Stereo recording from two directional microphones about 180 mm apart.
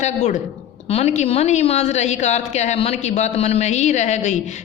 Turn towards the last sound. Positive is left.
turn(degrees=40)  # may be behind; listen again after turning